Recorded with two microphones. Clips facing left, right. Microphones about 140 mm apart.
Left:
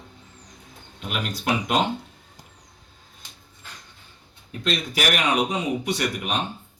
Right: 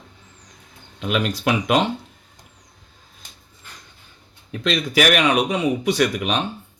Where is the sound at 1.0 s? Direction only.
90° right.